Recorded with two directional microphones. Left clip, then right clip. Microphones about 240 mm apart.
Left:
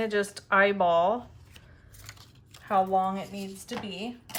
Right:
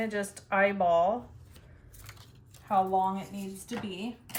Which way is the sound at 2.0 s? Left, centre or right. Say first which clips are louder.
Left 3 dB; centre.